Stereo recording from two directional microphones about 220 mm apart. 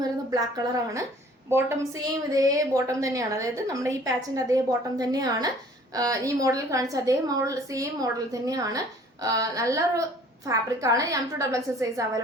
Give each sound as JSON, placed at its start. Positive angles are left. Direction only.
{"t": 0.3, "sound": "a woman's voice", "side_deg": -15}